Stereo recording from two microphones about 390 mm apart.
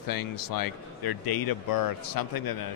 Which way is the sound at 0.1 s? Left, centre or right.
Left.